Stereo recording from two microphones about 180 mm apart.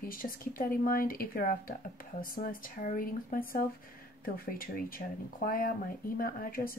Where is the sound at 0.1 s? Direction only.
50° left (ahead or behind).